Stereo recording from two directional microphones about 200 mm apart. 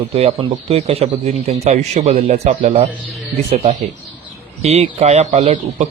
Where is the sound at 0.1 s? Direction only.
30° right (ahead or behind).